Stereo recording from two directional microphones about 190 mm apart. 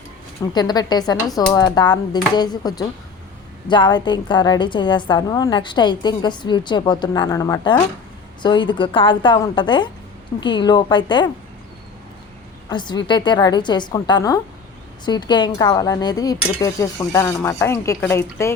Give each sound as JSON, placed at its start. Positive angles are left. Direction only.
{"t": 0.5, "sound": "a woman's voice", "side_deg": 20}
{"t": 12.6, "sound": "a woman's voice", "side_deg": 25}